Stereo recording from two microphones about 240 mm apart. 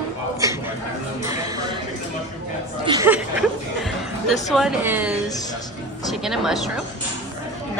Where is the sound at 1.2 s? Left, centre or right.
Centre.